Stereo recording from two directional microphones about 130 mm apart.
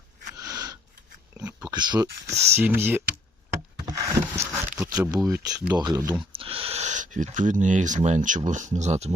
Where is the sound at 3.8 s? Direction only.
25° right (ahead or behind).